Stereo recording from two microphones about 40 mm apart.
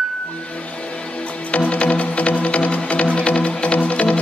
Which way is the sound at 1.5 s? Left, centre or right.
Left.